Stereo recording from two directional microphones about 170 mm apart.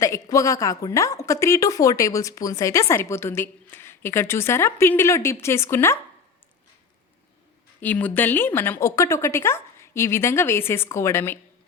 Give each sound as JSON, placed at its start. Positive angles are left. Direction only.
{"t": 0.0, "sound": "a woman's voice", "side_deg": 20}
{"t": 7.8, "sound": "a woman's voice", "side_deg": 10}